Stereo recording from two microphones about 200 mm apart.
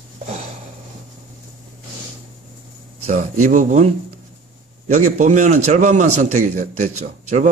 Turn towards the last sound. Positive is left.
turn(degrees=-35)  # may be behind; listen again after turning